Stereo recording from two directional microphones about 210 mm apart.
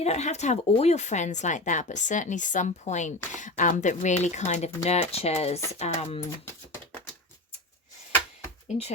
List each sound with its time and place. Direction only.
0.0 s speech: 30° left (ahead or behind)